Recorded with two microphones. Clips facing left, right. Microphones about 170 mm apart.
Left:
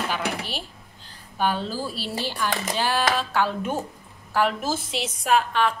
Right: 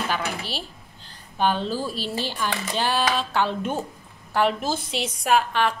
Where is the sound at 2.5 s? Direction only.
45° left (ahead or behind).